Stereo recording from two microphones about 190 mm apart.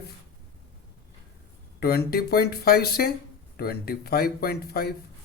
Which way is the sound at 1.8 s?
55° left (ahead or behind).